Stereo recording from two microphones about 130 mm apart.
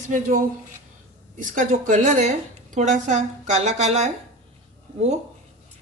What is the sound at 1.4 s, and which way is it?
A woman's voice, 75° right (ahead or behind).